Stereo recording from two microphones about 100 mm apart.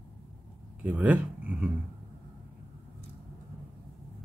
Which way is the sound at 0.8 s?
15° right (ahead or behind).